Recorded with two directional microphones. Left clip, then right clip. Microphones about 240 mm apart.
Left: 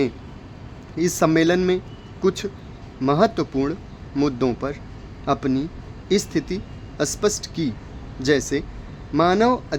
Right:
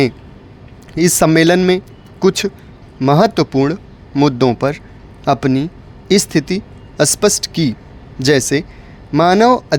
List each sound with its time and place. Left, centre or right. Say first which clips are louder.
0.9 s speech: right 7 dB; right